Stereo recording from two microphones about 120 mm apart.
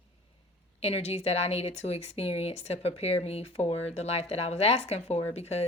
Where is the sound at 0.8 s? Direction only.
60° left (ahead or behind).